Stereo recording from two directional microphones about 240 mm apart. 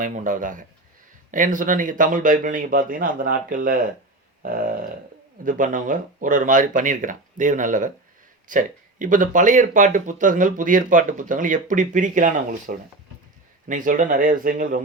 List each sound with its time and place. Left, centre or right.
0.0 s speech: right